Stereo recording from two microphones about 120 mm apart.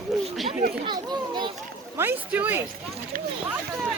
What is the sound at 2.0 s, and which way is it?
Speech, 15° right (ahead or behind).